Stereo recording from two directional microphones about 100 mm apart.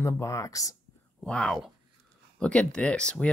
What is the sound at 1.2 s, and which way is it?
Speech, 5° left (ahead or behind).